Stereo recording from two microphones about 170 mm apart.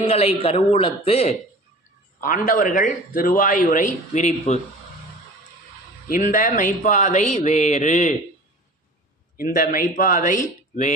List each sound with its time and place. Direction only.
0.1 s speech: 35° left (ahead or behind)
2.2 s a man's voice: 50° left (ahead or behind)
6.1 s a man's voice: 55° left (ahead or behind)
9.4 s a man's voice: 55° left (ahead or behind)